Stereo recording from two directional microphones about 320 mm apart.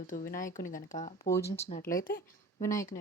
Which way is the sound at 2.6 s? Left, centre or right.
Centre.